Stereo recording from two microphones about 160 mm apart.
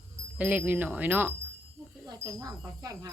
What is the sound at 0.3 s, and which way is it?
Speech, 10° right (ahead or behind).